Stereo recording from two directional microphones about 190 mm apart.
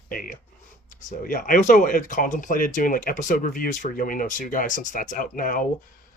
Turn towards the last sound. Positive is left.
turn(degrees=45)  # may be behind; listen again after turning